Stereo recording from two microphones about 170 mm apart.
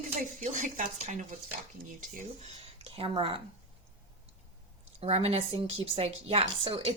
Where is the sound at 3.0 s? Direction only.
30° right (ahead or behind).